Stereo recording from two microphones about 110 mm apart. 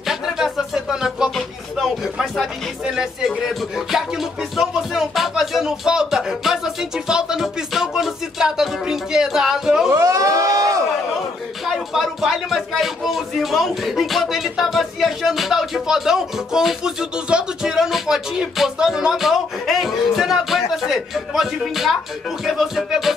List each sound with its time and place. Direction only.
0.1 s music: 5° right (ahead or behind)
9.8 s a sound: 25° right (ahead or behind)
11.6 s speech: centre (ahead or behind)